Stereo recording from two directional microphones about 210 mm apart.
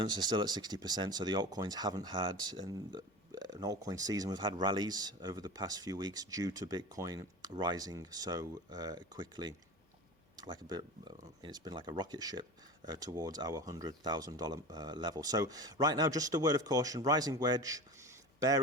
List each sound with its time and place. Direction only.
0.0 s speech: 20° right (ahead or behind)